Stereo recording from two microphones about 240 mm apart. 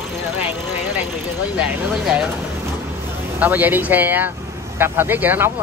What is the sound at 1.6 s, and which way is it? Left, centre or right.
Speech, centre.